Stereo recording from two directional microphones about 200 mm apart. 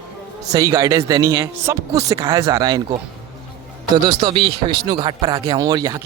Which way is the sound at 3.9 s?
20° right (ahead or behind).